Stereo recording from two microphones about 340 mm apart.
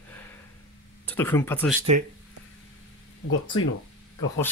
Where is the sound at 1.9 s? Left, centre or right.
Centre.